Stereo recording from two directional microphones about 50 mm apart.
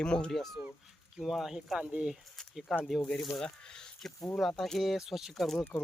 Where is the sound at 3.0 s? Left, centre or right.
Centre.